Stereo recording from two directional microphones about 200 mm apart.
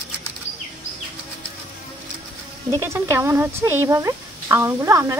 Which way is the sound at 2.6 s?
15° right (ahead or behind).